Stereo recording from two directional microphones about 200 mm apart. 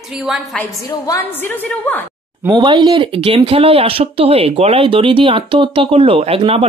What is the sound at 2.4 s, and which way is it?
Speech, 20° right (ahead or behind).